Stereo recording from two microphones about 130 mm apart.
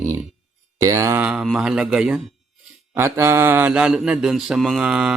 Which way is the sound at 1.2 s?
10° right (ahead or behind).